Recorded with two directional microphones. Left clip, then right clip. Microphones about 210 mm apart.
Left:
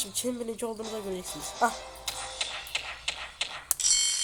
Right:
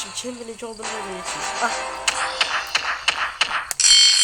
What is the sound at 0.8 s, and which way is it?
Speech, 25° right (ahead or behind).